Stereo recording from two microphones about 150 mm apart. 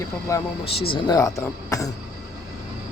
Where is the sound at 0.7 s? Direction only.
40° left (ahead or behind).